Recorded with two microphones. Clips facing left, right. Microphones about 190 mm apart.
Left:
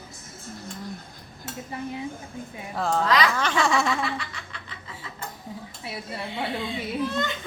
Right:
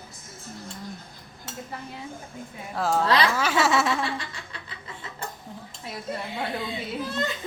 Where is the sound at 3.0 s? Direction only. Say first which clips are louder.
Even; 30° right (ahead or behind).